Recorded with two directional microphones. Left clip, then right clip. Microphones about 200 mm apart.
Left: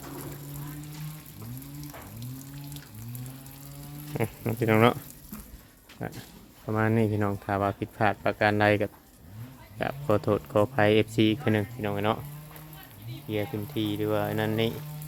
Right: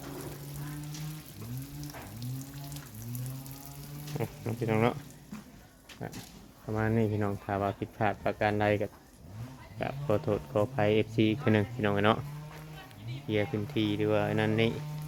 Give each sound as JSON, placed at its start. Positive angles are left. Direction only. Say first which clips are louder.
{"t": 4.2, "sound": "speech", "louder": "left 6 dB", "side_deg": 50}
{"t": 6.0, "sound": "speech", "louder": "left 5 dB", "side_deg": 40}
{"t": 11.8, "sound": "speech", "louder": "right 1 dB", "side_deg": -15}
{"t": 13.2, "sound": "speech", "louder": "right 1 dB", "side_deg": -10}